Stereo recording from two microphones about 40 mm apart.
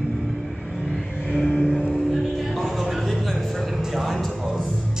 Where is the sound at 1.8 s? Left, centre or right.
Centre.